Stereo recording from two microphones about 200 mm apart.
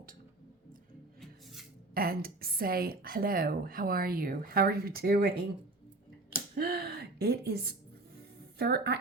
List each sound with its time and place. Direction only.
1.9 s a woman's voice: 50° right (ahead or behind)
6.6 s a woman's voice: 50° right (ahead or behind)